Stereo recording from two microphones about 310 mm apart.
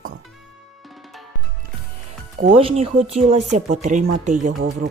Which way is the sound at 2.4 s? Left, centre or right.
Centre.